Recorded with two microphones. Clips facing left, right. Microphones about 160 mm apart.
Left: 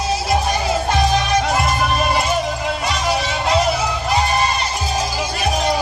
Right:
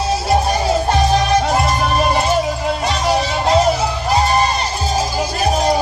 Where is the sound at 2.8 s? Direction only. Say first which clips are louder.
Right 4 dB; 35° right (ahead or behind).